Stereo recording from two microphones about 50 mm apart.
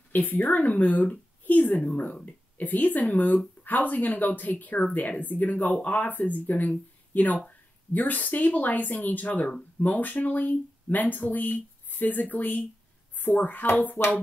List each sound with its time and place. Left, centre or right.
0.1 s speech: left